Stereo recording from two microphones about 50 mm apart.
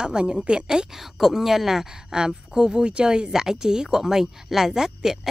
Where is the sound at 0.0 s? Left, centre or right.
Centre.